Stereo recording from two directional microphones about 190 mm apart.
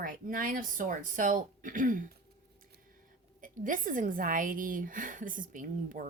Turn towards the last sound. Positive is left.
turn(degrees=-45)  # may be behind; listen again after turning